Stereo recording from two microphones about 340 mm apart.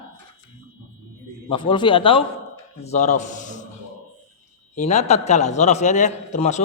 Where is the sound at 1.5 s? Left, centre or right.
Centre.